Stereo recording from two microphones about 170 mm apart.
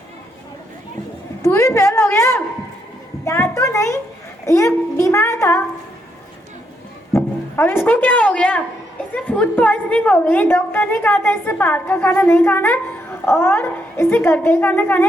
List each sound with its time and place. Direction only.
1.4 s a woman's voice: 20° left (ahead or behind)
7.1 s a woman's voice: 15° left (ahead or behind)